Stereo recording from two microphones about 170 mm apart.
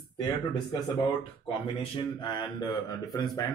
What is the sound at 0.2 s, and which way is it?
Speech, 25° left (ahead or behind).